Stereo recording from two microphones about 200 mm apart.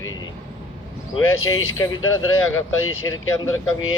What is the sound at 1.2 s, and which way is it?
Speech, 90° left.